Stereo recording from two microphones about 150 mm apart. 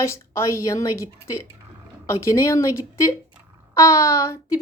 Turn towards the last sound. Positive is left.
turn(degrees=20)  # may be behind; listen again after turning